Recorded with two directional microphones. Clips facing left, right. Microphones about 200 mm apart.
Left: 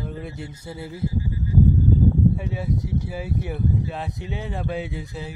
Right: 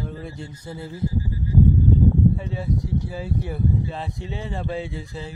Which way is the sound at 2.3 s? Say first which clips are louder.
Even; 10° left (ahead or behind).